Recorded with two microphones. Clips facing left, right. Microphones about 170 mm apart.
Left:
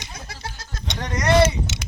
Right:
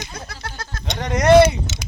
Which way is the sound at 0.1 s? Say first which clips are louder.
Right 3 dB; 60° right (ahead or behind).